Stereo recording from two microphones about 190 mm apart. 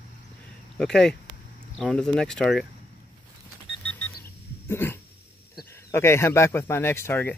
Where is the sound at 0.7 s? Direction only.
5° left (ahead or behind).